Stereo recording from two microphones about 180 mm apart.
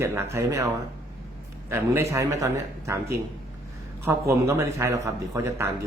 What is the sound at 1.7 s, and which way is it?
Speech, 15° right (ahead or behind).